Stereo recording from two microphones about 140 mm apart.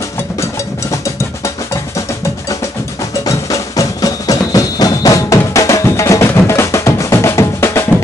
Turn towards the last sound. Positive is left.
turn(degrees=20)  # may be behind; listen again after turning